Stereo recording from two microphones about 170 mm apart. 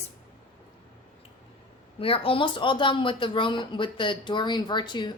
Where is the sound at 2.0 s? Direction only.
30° left (ahead or behind).